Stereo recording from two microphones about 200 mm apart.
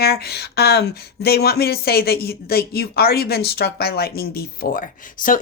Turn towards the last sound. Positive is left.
turn(degrees=45)  # may be behind; listen again after turning